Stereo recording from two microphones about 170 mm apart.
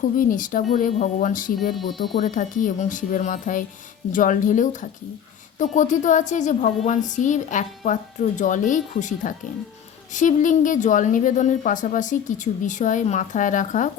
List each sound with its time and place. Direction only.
0.2 s a woman's voice: 50° left (ahead or behind)
1.7 s speech: centre (ahead or behind)
2.1 s a woman's voice: 45° left (ahead or behind)